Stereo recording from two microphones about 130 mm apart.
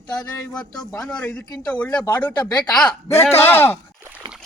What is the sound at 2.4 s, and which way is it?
Speech, 30° left (ahead or behind).